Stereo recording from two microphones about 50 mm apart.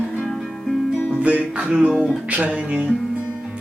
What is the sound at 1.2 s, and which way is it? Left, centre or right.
Music, right.